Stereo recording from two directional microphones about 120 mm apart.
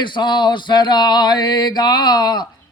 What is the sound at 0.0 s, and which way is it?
Speech, 40° left (ahead or behind).